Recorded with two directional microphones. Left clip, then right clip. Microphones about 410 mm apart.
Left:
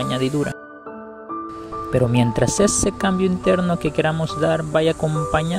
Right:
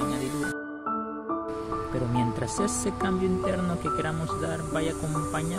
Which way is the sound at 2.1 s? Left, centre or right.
Centre.